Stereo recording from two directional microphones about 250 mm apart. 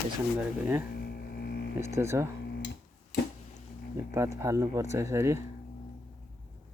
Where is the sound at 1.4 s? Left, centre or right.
Left.